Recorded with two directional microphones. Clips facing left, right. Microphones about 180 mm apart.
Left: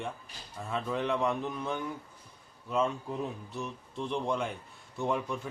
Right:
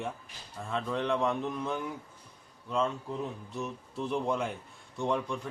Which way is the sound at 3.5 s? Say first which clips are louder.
Right 2 dB; centre (ahead or behind).